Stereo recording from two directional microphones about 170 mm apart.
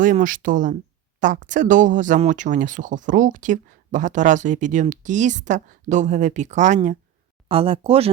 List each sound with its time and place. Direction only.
0.0 s speech: 50° right (ahead or behind)
7.4 s speech: 30° right (ahead or behind)